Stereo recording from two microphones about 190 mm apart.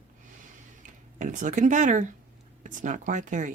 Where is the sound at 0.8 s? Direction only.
40° right (ahead or behind).